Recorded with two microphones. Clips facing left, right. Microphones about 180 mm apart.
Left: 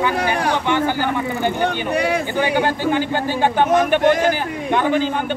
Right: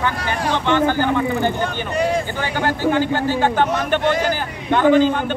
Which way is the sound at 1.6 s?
65° left (ahead or behind).